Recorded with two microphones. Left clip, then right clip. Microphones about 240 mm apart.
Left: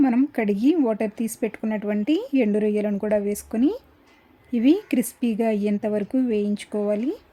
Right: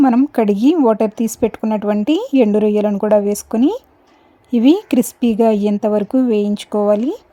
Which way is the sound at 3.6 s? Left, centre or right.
Centre.